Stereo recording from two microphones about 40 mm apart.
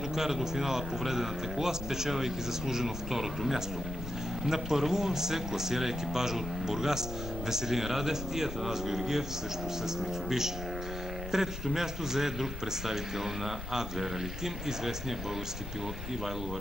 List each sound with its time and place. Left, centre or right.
0.1 s speech: centre